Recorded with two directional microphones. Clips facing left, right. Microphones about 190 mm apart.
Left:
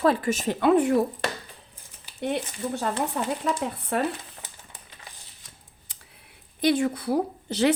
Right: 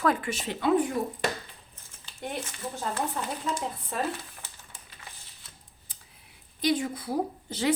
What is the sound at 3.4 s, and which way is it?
Speech, 65° left (ahead or behind).